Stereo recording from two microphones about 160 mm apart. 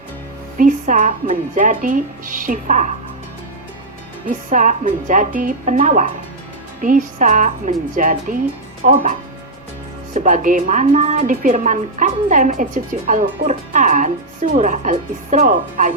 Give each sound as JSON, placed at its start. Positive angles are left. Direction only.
{"t": 0.6, "sound": "a woman's voice", "side_deg": -50}
{"t": 4.3, "sound": "a woman's voice", "side_deg": -55}
{"t": 10.2, "sound": "a woman's voice", "side_deg": -55}